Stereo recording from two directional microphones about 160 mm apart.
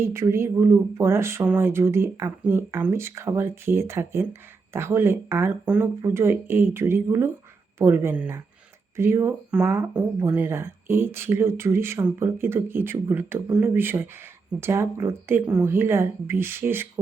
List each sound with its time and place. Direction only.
0.0 s speech: 15° right (ahead or behind)